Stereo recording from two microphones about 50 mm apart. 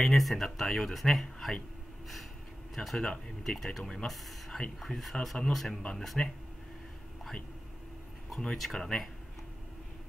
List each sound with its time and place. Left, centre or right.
0.0 s speech: centre
2.7 s speech: centre
5.8 s speech: centre
8.7 s speech: centre